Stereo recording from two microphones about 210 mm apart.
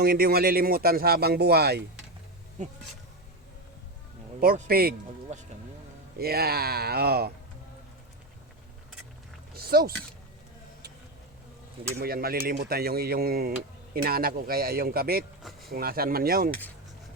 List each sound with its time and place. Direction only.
0.0 s speech: 45° right (ahead or behind)
4.4 s speech: 45° right (ahead or behind)
9.6 s a sound: 45° right (ahead or behind)
11.9 s speech: 45° right (ahead or behind)